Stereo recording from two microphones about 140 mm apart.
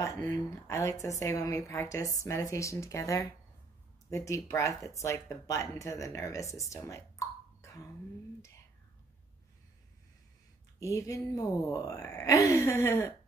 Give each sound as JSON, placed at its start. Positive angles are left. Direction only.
{"t": 0.0, "sound": "speech", "side_deg": 25}
{"t": 10.8, "sound": "speech", "side_deg": 20}